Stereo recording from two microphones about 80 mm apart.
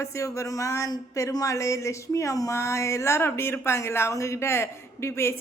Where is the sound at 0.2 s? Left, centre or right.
Left.